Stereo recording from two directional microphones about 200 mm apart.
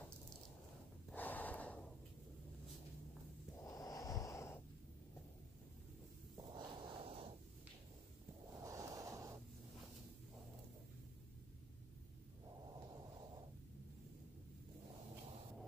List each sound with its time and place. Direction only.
1.1 s gasp: 10° left (ahead or behind)
3.6 s snort: 20° left (ahead or behind)
6.3 s snort: 20° right (ahead or behind)
8.5 s snort: 15° right (ahead or behind)